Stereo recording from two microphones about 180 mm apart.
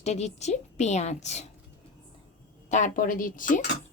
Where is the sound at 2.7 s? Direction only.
45° left (ahead or behind).